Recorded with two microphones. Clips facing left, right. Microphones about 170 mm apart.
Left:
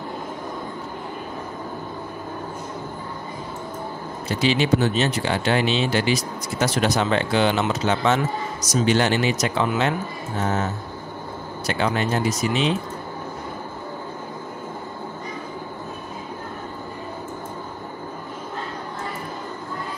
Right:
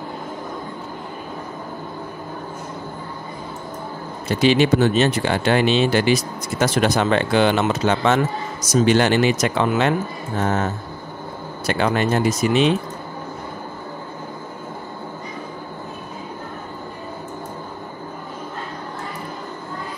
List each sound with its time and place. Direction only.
4.4 s speech: 55° right (ahead or behind)
11.6 s speech: 60° right (ahead or behind)